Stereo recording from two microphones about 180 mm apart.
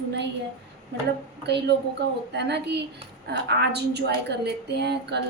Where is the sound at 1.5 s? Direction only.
70° right (ahead or behind).